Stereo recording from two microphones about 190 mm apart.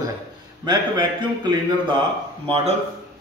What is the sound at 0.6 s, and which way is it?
A man's voice, 25° right (ahead or behind).